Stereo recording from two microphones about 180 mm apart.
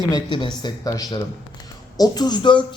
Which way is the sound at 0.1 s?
25° left (ahead or behind).